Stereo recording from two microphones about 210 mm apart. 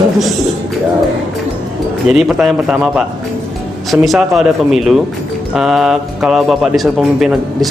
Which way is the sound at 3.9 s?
Centre (ahead or behind).